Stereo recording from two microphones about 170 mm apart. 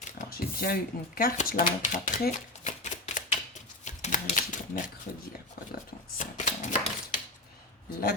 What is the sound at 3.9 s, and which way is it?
Typewriter, 45° left (ahead or behind).